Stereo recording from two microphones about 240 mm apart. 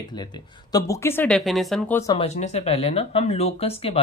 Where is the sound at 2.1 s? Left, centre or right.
Left.